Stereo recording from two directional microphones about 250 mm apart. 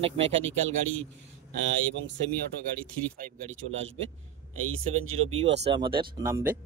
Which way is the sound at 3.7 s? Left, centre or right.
Right.